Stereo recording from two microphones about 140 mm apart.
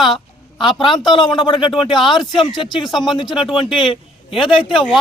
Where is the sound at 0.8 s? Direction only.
30° left (ahead or behind).